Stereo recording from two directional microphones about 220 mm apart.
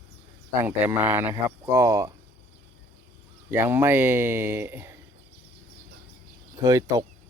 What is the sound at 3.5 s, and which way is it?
Speech, 10° right (ahead or behind).